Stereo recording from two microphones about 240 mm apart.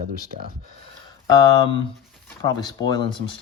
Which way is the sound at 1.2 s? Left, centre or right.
Centre.